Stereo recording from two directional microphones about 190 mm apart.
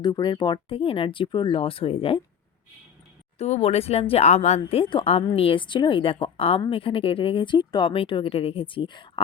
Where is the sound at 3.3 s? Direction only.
35° left (ahead or behind).